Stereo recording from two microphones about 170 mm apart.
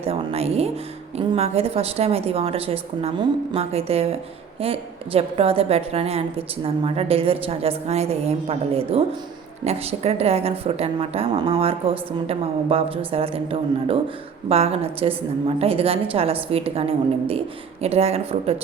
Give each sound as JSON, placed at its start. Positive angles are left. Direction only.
{"t": 0.0, "sound": "a woman's voice", "side_deg": -35}